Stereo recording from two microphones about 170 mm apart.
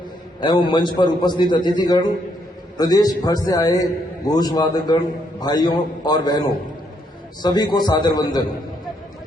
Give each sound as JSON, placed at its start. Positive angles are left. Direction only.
{"t": 0.4, "sound": "a man's voice", "side_deg": 25}
{"t": 7.4, "sound": "a man's voice", "side_deg": 25}